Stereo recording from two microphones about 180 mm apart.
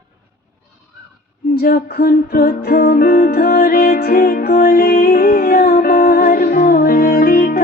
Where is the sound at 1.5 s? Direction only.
55° left (ahead or behind).